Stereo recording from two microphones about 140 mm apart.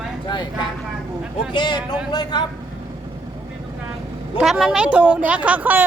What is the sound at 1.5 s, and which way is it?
Speech, 30° left (ahead or behind).